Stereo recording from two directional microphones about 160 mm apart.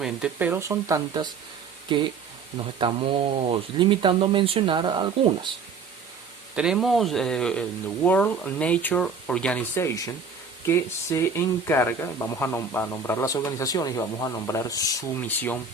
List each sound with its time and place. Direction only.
0.0 s speech: 5° right (ahead or behind); by 5.5 s 30° right (ahead or behind)
6.6 s speech: 5° right (ahead or behind); by 15.2 s 20° left (ahead or behind)
15.2 s speech: 10° left (ahead or behind)